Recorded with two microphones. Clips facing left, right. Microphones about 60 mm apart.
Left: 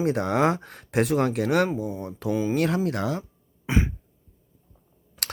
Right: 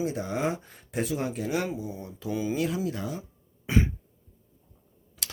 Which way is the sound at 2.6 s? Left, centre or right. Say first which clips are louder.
Left 5 dB; left.